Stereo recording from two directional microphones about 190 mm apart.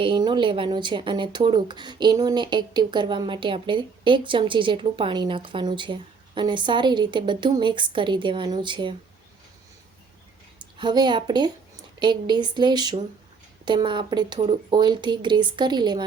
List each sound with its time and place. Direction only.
0.0 s speech: 25° right (ahead or behind)
10.8 s speech: 25° right (ahead or behind)